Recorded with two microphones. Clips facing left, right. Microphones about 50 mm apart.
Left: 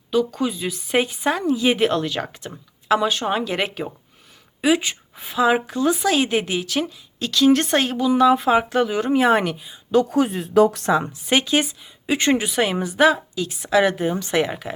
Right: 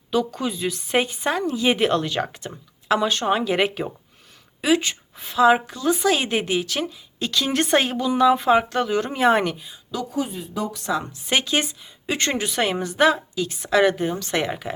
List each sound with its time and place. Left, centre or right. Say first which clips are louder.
0.1 s speech: left 2 dB; centre
4.6 s speech: left 1 dB; centre
9.9 s speech: left 11 dB; left
10.2 s speech: left 8 dB; left
11.3 s speech: left 2 dB; centre